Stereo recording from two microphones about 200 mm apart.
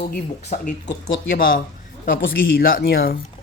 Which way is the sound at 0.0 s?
45° left (ahead or behind).